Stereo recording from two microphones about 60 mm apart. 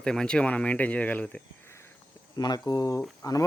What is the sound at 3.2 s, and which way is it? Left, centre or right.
Speech, left.